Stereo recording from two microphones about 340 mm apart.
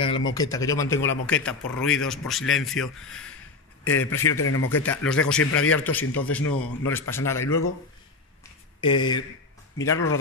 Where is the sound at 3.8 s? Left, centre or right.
Left.